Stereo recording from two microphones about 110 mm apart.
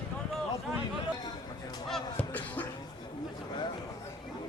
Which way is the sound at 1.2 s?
40° left (ahead or behind).